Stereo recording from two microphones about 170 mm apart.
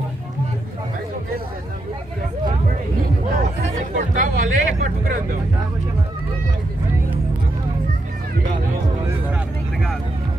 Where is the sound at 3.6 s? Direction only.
45° right (ahead or behind).